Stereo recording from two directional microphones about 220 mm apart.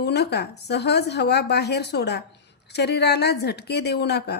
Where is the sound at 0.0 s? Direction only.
50° left (ahead or behind).